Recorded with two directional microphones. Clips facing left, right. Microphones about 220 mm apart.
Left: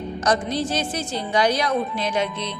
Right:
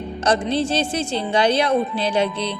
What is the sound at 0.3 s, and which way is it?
Speech, 30° right (ahead or behind).